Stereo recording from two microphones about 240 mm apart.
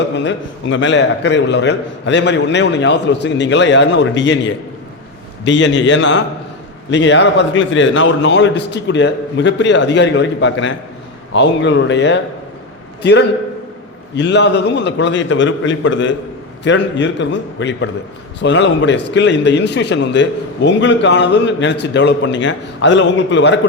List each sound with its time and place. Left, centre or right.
0.2 s a man's voice: left